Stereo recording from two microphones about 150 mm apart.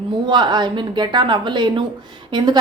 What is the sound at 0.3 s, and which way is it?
A woman's voice, 30° right (ahead or behind).